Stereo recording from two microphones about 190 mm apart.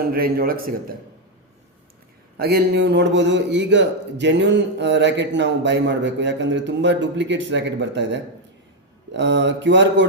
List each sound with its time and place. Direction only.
0.0 s a man's voice: 50° right (ahead or behind)
2.4 s a man's voice: 55° right (ahead or behind); by 10.1 s 70° right (ahead or behind)